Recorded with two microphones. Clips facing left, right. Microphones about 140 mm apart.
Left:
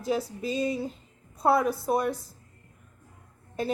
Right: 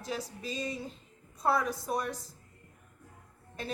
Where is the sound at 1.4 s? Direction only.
40° left (ahead or behind).